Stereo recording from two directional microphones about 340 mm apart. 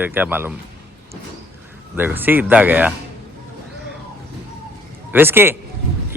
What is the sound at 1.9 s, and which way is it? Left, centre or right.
Speech, centre.